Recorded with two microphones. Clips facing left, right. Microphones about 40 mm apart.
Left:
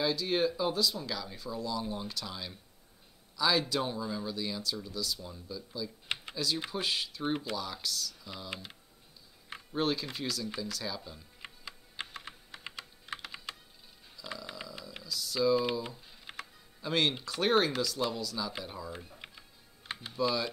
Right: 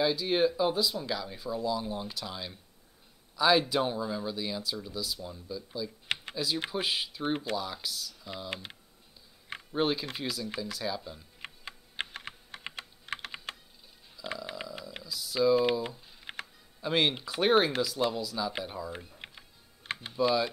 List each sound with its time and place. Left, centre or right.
0.0 s speech: centre
9.7 s speech: centre
11.4 s typing: right
12.7 s computer keyboard: right
14.2 s a sound: right
14.5 s speech: centre
16.3 s music: right
16.8 s speech: centre
19.1 s music: right
20.1 s speech: centre